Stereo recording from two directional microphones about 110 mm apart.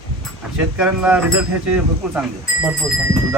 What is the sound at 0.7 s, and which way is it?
Speech, 10° right (ahead or behind).